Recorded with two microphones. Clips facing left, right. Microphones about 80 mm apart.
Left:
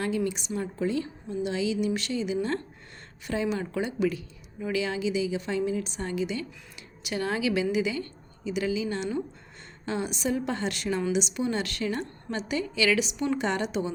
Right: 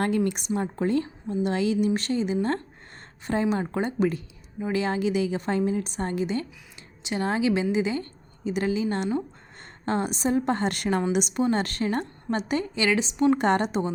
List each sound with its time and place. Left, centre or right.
0.3 s a woman's voice: right
0.5 s a woman's voice: right
7.0 s a woman's voice: right
13.4 s a woman's voice: right